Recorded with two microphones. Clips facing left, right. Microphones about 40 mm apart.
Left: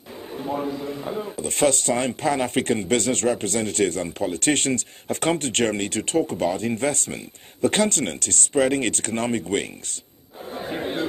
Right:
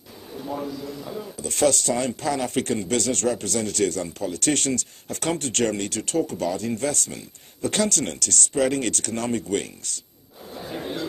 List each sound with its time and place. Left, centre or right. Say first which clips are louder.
0.3 s speech: left 3 dB; left
10.5 s chatter: left 3 dB; left